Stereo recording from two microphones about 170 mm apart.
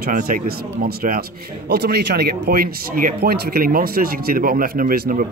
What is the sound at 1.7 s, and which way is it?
Speech, 70° right (ahead or behind).